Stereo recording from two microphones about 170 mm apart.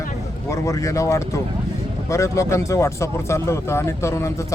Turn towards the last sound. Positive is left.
turn(degrees=15)  # may be behind; listen again after turning